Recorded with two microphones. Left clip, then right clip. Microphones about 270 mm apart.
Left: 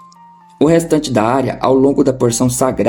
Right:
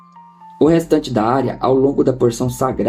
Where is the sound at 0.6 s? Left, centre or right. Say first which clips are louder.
Left 2 dB; left.